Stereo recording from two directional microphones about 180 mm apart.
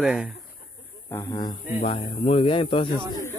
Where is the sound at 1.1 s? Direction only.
20° left (ahead or behind).